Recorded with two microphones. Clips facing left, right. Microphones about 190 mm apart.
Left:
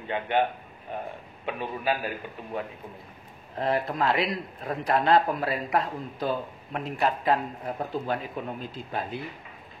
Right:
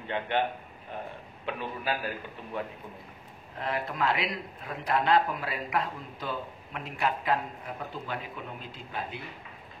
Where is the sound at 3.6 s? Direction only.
35° left (ahead or behind).